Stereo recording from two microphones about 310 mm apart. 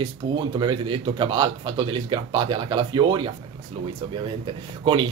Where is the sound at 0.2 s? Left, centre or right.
Centre.